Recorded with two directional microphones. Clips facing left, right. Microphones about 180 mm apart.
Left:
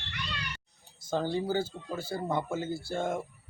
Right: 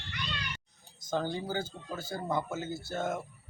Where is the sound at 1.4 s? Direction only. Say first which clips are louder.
Left 5 dB; 10° left (ahead or behind).